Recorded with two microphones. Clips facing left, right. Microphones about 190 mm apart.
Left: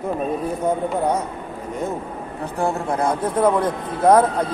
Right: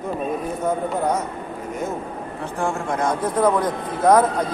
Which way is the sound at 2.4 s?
35° left (ahead or behind).